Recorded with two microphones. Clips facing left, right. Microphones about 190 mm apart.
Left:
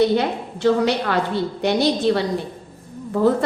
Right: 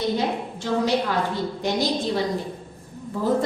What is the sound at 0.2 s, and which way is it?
A woman's voice, 70° left (ahead or behind).